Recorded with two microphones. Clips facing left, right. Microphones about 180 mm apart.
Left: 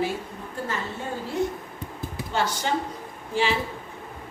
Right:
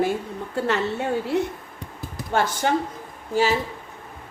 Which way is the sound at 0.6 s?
75° right (ahead or behind).